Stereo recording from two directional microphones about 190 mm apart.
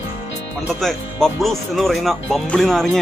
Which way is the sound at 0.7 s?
Centre (ahead or behind).